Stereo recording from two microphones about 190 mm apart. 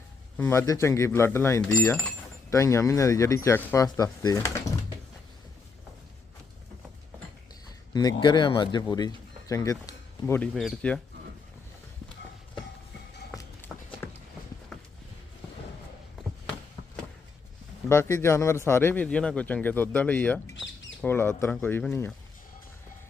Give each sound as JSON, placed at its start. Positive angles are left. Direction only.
{"t": 0.3, "sound": "a man's voice", "side_deg": 10}
{"t": 7.9, "sound": "speech", "side_deg": 20}
{"t": 10.5, "sound": "speech", "side_deg": 0}
{"t": 13.3, "sound": "run", "side_deg": 10}
{"t": 14.7, "sound": "clip-clop", "side_deg": 0}
{"t": 17.8, "sound": "a man's voice", "side_deg": 15}